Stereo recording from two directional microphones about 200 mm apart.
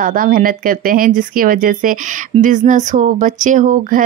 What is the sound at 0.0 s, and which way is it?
Speech, 45° right (ahead or behind).